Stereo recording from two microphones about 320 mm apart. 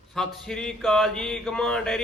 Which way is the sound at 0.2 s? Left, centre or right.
Centre.